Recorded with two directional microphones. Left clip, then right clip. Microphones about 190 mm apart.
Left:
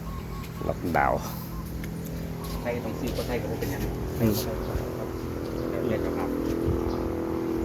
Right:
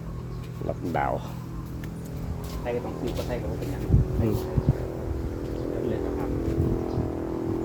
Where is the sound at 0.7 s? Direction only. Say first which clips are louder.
Left 3 dB; 10° right (ahead or behind).